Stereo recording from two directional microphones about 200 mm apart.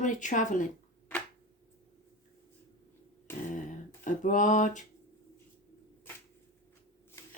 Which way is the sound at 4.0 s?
40° left (ahead or behind).